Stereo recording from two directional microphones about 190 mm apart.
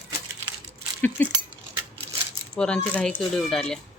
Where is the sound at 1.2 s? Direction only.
10° left (ahead or behind).